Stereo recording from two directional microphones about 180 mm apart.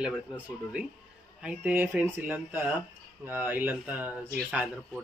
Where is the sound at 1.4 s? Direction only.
10° right (ahead or behind).